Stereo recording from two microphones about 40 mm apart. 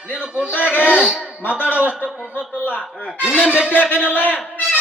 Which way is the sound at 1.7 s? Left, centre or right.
Right.